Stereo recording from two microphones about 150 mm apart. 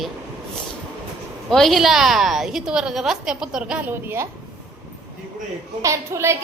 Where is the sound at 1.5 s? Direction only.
Centre (ahead or behind); by 4.3 s 15° right (ahead or behind).